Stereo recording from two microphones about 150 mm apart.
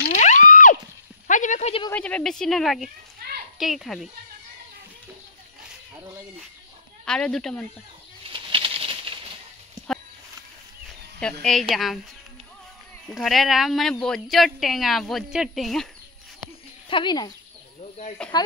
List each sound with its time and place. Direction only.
0.2 s music: 55° left (ahead or behind)
1.2 s a sound: 55° left (ahead or behind)
1.9 s speech: 10° left (ahead or behind)
7.1 s speech: 5° left (ahead or behind)
8.3 s a sound: 35° right (ahead or behind)
11.1 s speech: 5° left (ahead or behind)
13.1 s speech: centre (ahead or behind)
16.9 s speech: 30° left (ahead or behind)
18.3 s speech: 30° left (ahead or behind)